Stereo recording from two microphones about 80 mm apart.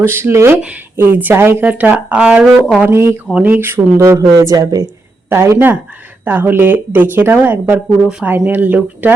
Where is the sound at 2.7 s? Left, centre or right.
Right.